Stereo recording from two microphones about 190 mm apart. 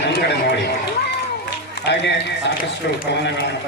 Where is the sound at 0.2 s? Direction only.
60° left (ahead or behind).